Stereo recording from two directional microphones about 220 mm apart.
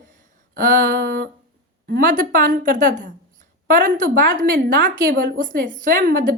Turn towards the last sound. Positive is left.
turn(degrees=-40)  # may be behind; listen again after turning